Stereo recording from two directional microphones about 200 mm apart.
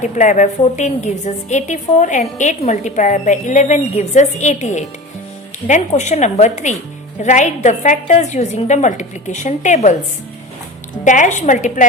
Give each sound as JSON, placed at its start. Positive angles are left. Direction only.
{"t": 0.0, "sound": "a woman's voice", "side_deg": 35}
{"t": 11.0, "sound": "a woman's voice", "side_deg": 40}